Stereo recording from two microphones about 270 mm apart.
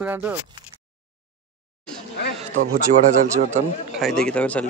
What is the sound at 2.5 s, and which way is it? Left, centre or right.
Speech, right.